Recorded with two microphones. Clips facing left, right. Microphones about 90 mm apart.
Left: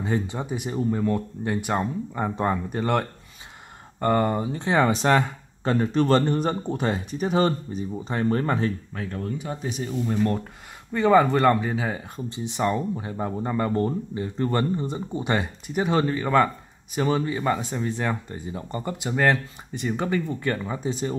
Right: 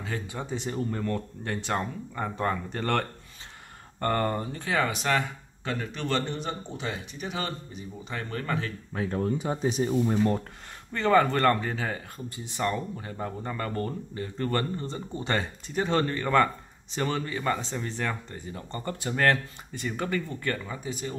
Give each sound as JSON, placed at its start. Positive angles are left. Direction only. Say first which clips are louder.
{"t": 0.0, "sound": "speech", "louder": "left 8 dB", "side_deg": 25}
{"t": 0.4, "sound": "speech", "louder": "left 4 dB", "side_deg": 15}
{"t": 8.9, "sound": "speech", "louder": "right 3 dB", "side_deg": -20}
{"t": 10.1, "sound": "speech", "louder": "left 1 dB", "side_deg": -5}
{"t": 10.9, "sound": "speech", "louder": "left 4 dB", "side_deg": 15}